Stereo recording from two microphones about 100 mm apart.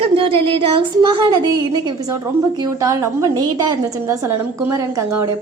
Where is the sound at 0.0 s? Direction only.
70° right (ahead or behind).